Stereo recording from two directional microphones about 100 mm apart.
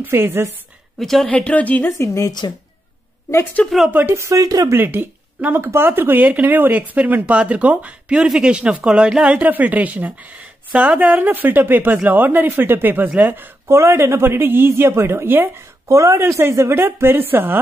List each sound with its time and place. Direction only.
0.0 s speech: 25° right (ahead or behind)
0.9 s speech: 5° left (ahead or behind)
1.3 s speech: 15° left (ahead or behind)
1.9 s a woman's voice: 30° left (ahead or behind)
3.6 s speech: 10° left (ahead or behind)
3.9 s speech: 25° right (ahead or behind)
4.7 s speech: 20° right (ahead or behind)